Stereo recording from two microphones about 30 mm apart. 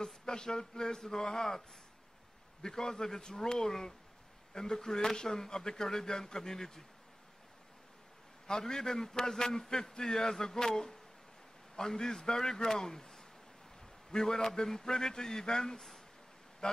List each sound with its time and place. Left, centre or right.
0.0 s speech: left
2.6 s a man's voice: left
8.5 s a man's voice: centre